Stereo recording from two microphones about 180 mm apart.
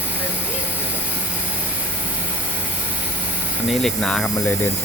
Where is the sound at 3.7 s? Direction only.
Centre (ahead or behind).